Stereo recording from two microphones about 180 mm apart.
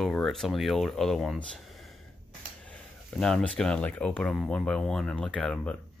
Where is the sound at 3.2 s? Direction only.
5° left (ahead or behind).